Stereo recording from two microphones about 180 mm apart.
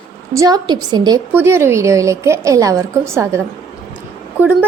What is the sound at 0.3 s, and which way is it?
Speech, 20° right (ahead or behind).